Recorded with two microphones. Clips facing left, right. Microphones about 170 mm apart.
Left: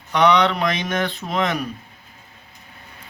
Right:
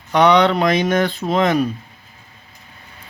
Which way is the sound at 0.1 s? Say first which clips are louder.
Right 4 dB; 35° right (ahead or behind).